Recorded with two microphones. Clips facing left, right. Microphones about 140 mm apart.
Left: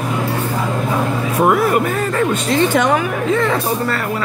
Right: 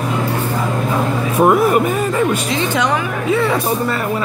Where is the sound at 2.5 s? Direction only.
50° left (ahead or behind).